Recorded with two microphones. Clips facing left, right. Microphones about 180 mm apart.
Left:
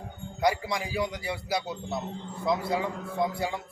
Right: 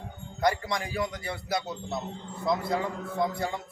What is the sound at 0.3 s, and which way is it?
A man's voice, 5° left (ahead or behind).